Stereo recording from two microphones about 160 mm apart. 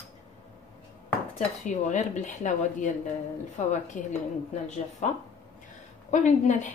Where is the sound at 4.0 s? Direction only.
55° left (ahead or behind).